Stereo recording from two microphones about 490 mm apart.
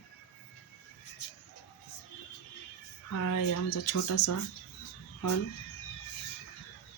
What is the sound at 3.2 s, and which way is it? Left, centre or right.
Speech, left.